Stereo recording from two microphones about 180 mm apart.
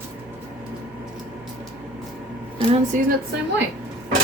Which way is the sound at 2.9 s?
45° right (ahead or behind).